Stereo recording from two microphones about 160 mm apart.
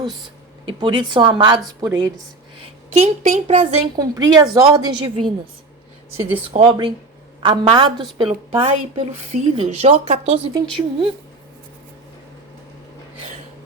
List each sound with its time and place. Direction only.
0.7 s a woman's voice: 30° right (ahead or behind)
2.6 s a sound: 40° right (ahead or behind)
3.4 s a woman's voice: 35° right (ahead or behind)